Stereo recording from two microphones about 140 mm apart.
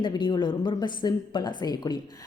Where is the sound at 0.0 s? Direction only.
35° left (ahead or behind).